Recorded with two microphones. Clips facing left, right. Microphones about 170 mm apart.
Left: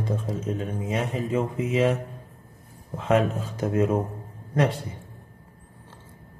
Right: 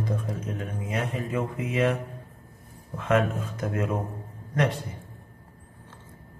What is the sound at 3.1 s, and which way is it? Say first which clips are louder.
Speech: left 2 dB; 35° left (ahead or behind).